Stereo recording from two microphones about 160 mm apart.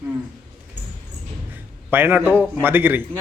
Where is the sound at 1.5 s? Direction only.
10° right (ahead or behind).